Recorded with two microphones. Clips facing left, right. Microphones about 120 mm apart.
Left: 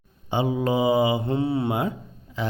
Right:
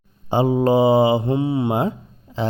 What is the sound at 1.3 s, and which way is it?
Mantra, 15° right (ahead or behind).